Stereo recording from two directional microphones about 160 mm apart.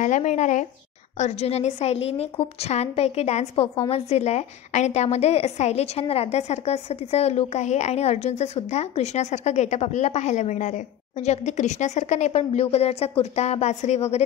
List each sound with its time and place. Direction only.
0.0 s a woman's voice: 50° left (ahead or behind)